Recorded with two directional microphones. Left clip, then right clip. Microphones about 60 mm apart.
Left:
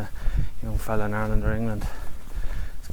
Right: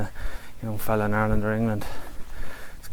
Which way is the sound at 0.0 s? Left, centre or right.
Right.